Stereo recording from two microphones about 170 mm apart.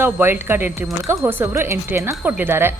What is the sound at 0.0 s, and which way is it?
A woman's voice, 15° right (ahead or behind).